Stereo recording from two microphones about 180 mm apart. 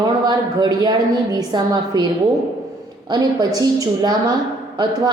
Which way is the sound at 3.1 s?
20° right (ahead or behind).